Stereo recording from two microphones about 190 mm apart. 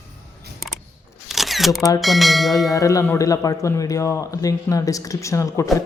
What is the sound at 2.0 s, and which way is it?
Speech, centre (ahead or behind).